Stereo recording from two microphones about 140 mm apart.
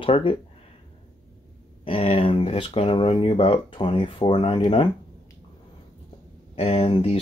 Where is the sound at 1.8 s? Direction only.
40° left (ahead or behind).